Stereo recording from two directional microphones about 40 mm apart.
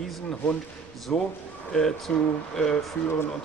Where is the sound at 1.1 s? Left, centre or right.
Centre.